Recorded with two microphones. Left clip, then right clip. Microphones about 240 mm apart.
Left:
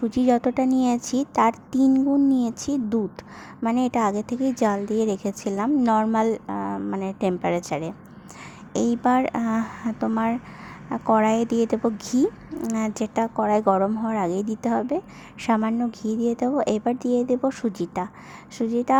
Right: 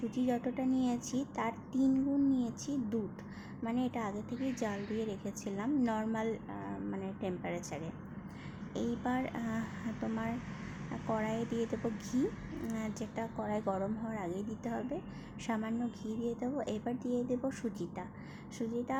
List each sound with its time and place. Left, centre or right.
0.1 s a woman's voice: left